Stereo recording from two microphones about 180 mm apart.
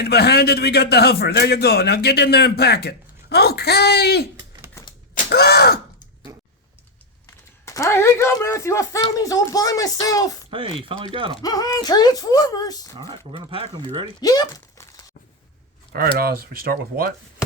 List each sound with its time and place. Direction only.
0.0 s a man's voice: 65° left (ahead or behind)
4.8 s a sound: 15° left (ahead or behind)
5.1 s groan: 60° left (ahead or behind)
6.3 s a sound: 20° right (ahead or behind)
7.6 s speech: 15° left (ahead or behind)
10.5 s speech: 30° right (ahead or behind)
11.4 s speech: 20° left (ahead or behind)
13.0 s speech: 25° right (ahead or behind)
14.2 s speech: 20° left (ahead or behind)
16.1 s speech: 55° right (ahead or behind)